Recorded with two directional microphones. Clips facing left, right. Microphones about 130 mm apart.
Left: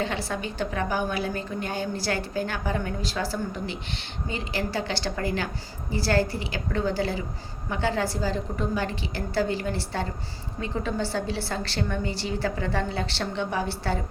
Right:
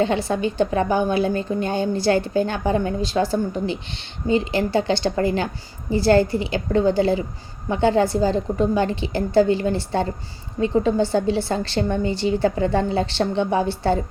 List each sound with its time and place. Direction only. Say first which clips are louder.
0.0 s a woman's voice: right 9 dB; 20° right (ahead or behind)